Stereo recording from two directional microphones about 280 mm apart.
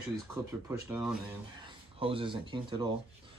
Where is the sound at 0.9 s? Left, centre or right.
Centre.